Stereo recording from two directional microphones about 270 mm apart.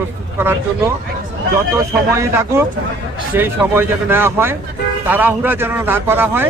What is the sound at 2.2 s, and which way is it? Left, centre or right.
A man's voice, centre.